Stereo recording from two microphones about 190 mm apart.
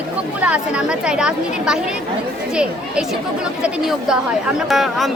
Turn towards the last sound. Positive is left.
turn(degrees=0)  # may be behind; listen again after turning